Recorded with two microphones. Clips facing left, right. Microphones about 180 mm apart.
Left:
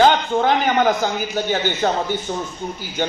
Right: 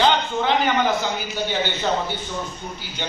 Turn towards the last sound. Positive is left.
turn(degrees=45)  # may be behind; listen again after turning